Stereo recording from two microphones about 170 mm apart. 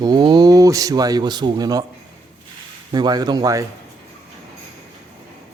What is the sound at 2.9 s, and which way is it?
Speech, 25° right (ahead or behind).